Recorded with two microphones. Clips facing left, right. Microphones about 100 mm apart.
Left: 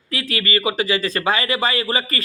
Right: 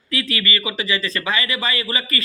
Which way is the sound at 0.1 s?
45° left (ahead or behind).